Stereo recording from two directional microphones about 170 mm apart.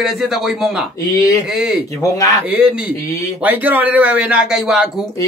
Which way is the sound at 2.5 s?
10° right (ahead or behind).